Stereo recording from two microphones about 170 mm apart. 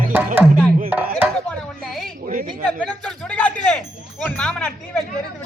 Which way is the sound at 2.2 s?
50° right (ahead or behind).